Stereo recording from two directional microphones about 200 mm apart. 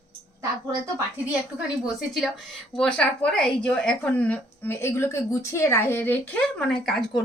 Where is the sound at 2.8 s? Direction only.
5° left (ahead or behind).